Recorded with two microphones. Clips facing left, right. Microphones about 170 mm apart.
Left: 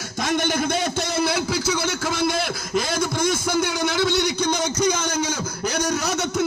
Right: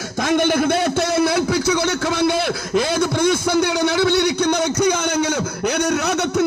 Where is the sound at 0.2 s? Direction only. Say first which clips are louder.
Right 5 dB; 55° right (ahead or behind).